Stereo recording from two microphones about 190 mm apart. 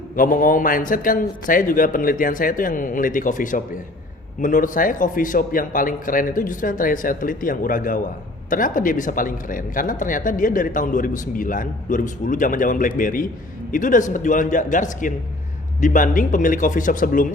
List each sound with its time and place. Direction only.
0.2 s speech: 45° left (ahead or behind)